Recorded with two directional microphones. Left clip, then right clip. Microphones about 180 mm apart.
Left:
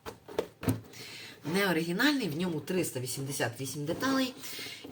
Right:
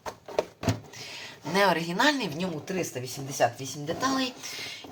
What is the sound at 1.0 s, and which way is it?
Speech, 15° left (ahead or behind).